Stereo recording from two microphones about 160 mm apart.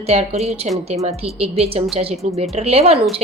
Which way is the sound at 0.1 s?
40° right (ahead or behind).